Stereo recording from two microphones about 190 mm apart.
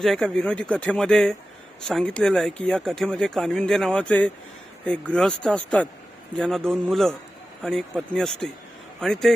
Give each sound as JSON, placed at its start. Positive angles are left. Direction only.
{"t": 0.0, "sound": "speech", "side_deg": 0}